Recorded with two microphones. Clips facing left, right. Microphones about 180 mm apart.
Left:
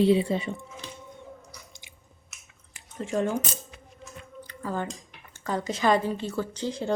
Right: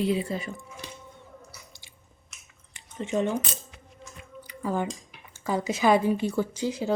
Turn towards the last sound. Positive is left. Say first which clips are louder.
# right 2 dB
turn(degrees=-10)  # may be behind; listen again after turning